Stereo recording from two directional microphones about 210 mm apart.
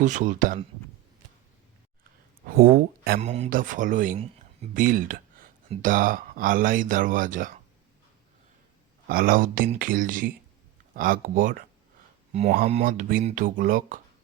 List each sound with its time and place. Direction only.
0.0 s speech: 35° right (ahead or behind)
2.5 s speech: 45° right (ahead or behind)
3.2 s speech: 30° right (ahead or behind)
9.0 s speech: 45° right (ahead or behind)
12.3 s speech: 30° right (ahead or behind)